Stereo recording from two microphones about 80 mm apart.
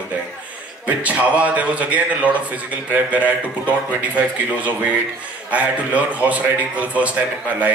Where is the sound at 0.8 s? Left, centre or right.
Centre.